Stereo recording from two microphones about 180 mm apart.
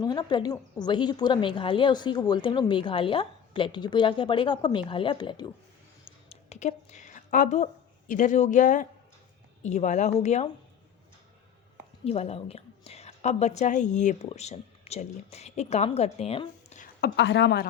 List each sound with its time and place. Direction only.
0.0 s a woman's voice: 25° left (ahead or behind)
6.1 s a sound: 35° left (ahead or behind)
9.6 s a woman's voice: 40° left (ahead or behind)
12.0 s a woman's voice: 35° left (ahead or behind)
16.8 s a woman's voice: 65° left (ahead or behind)